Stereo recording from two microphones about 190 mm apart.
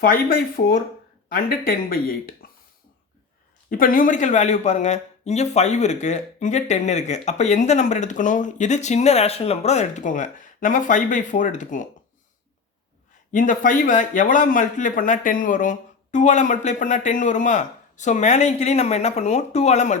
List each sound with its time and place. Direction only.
0.0 s speech: 50° left (ahead or behind)
3.7 s speech: 45° left (ahead or behind)
13.3 s speech: 45° left (ahead or behind)